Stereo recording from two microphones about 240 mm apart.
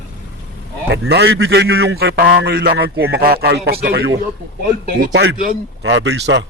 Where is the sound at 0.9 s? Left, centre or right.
Right.